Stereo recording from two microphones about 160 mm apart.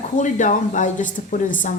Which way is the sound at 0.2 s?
50° left (ahead or behind).